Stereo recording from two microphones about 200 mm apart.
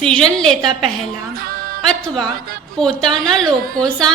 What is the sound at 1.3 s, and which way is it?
Music, 45° right (ahead or behind).